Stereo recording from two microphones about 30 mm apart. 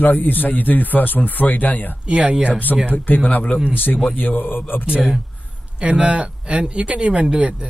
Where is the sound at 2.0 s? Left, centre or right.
Right.